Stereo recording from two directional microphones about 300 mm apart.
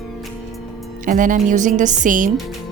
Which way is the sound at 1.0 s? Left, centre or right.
Right.